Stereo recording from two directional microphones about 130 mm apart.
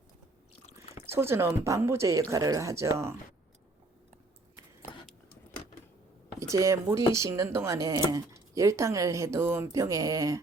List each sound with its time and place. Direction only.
1.0 s speech: 20° right (ahead or behind)
6.5 s speech: 25° right (ahead or behind)